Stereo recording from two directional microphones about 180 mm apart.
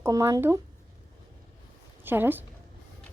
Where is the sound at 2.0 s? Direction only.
10° right (ahead or behind).